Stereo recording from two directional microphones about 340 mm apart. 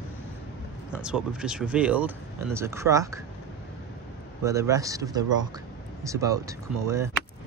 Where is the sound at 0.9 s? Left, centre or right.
Centre.